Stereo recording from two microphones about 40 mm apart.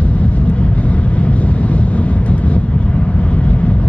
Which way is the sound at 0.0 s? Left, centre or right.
Left.